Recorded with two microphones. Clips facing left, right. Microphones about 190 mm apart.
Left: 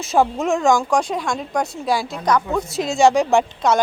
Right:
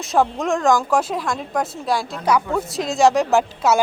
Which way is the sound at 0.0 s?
Centre (ahead or behind).